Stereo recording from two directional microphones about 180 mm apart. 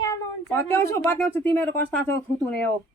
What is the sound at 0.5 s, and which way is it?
Speech, 15° left (ahead or behind).